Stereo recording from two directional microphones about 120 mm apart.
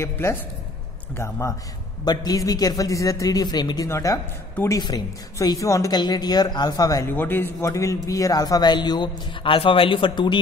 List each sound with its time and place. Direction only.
0.0 s a man's voice: 20° left (ahead or behind)
7.1 s a man's voice: 15° left (ahead or behind); by 10.4 s 40° left (ahead or behind)